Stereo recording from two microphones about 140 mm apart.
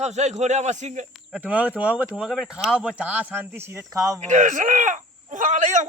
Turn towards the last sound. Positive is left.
turn(degrees=-60)  # may be behind; listen again after turning